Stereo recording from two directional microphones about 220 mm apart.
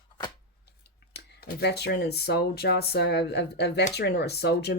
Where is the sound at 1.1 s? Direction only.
50° left (ahead or behind).